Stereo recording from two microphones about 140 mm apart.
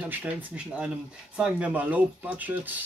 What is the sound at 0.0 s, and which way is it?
Speech, 10° right (ahead or behind).